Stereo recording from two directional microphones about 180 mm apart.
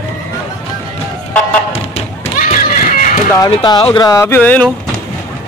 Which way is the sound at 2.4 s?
50° left (ahead or behind).